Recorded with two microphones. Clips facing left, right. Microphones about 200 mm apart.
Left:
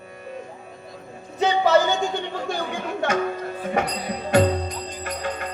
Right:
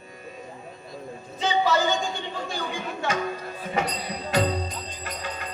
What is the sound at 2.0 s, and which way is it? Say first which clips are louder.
Chuckle: left 5 dB; 55° left (ahead or behind).